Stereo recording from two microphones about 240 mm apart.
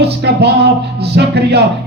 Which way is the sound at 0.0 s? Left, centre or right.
Right.